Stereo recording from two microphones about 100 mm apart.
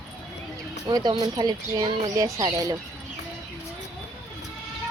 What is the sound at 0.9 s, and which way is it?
Speech, 45° right (ahead or behind).